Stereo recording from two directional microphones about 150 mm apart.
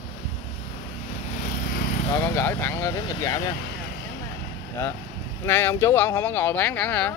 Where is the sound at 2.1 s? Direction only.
20° left (ahead or behind).